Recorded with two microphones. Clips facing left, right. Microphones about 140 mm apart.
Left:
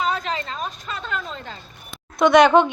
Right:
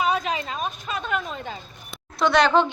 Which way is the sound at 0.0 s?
15° right (ahead or behind).